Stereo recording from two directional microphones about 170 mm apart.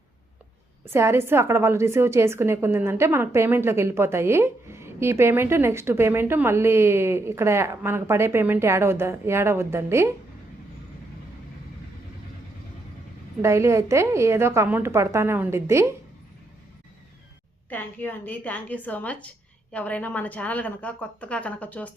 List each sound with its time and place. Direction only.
0.9 s a woman's voice: 15° right (ahead or behind)
13.4 s a woman's voice: 15° right (ahead or behind)
17.7 s a woman's voice: 10° left (ahead or behind)